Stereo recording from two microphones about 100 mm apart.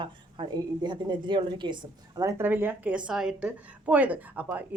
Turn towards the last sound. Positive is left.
turn(degrees=-15)  # may be behind; listen again after turning